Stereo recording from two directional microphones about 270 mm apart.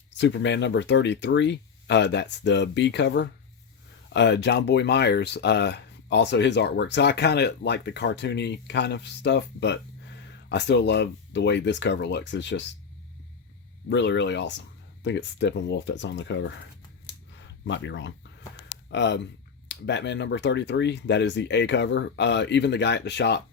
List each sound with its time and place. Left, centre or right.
0.1 s speech: left
13.9 s speech: left
17.7 s speech: left